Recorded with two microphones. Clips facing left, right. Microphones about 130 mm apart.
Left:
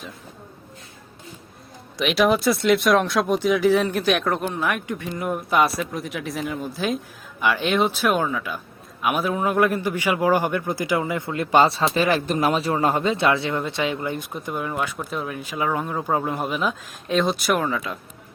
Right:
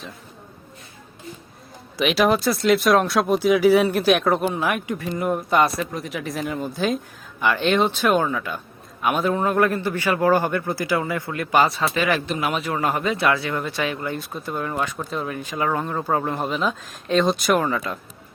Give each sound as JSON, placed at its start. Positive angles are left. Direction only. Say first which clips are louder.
{"t": 2.0, "sound": "a man's voice", "louder": "even", "side_deg": 0}
{"t": 14.9, "sound": "speech", "louder": "right 1 dB", "side_deg": 0}